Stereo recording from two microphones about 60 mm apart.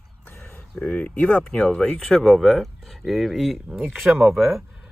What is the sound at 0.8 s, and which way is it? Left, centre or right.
Speech, left.